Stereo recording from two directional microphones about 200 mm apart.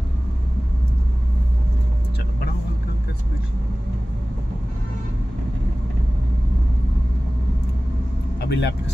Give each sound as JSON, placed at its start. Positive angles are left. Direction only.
{"t": 8.5, "sound": "speech", "side_deg": 60}